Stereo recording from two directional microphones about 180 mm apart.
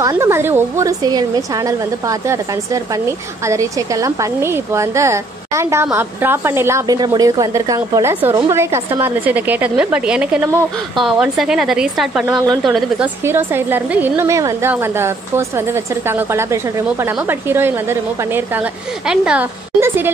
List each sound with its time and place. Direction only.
0.0 s speech: 15° right (ahead or behind)
13.2 s speech: 10° right (ahead or behind)